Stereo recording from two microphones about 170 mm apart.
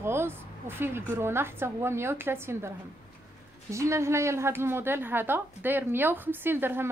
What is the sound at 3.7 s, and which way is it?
A woman's voice, 15° right (ahead or behind).